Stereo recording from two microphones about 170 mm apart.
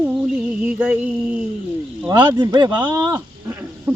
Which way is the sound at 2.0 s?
25° right (ahead or behind).